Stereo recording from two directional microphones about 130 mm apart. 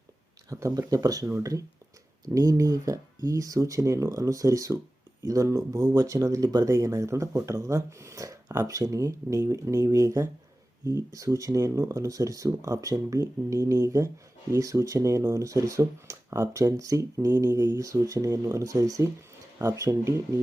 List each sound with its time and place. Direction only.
0.5 s speech: 25° right (ahead or behind)